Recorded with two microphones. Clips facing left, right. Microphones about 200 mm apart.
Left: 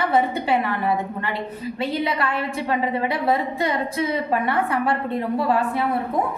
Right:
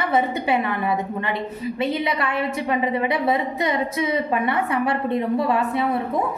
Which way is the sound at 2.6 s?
20° right (ahead or behind).